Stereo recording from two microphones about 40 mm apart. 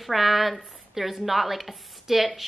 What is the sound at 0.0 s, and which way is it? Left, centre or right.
A woman's voice, centre.